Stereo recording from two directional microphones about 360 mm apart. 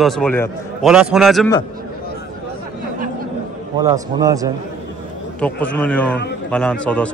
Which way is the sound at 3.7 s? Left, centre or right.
Centre.